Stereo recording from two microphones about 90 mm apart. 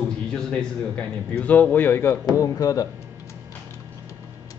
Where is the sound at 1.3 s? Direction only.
20° left (ahead or behind).